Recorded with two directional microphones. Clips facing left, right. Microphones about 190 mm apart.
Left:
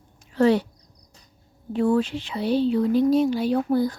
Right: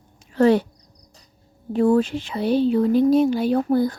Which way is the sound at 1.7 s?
40° right (ahead or behind).